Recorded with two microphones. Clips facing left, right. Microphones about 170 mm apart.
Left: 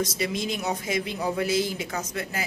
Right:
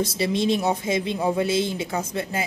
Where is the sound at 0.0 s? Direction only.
30° right (ahead or behind).